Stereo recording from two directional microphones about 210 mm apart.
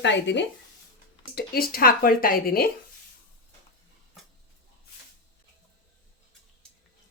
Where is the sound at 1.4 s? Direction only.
45° left (ahead or behind).